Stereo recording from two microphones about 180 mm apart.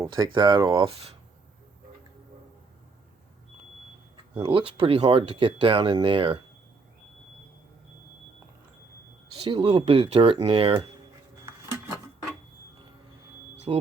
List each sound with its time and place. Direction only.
0.0 s speech: 25° right (ahead or behind)
4.4 s speech: 30° right (ahead or behind)
9.4 s speech: 30° right (ahead or behind)
13.7 s speech: 30° right (ahead or behind)